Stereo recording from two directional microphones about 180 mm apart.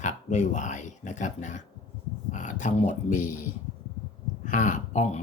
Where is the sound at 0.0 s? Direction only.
40° left (ahead or behind).